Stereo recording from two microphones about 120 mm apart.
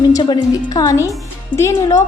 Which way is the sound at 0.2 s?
35° left (ahead or behind).